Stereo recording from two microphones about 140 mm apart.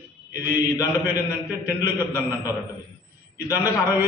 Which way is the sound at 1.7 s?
25° left (ahead or behind).